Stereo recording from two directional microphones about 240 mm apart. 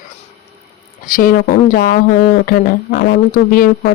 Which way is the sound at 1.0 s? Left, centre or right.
Left.